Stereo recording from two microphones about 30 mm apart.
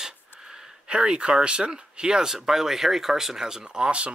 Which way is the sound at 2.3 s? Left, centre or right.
Centre.